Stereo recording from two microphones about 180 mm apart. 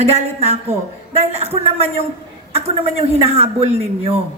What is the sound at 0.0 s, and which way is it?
A woman's voice, 35° right (ahead or behind).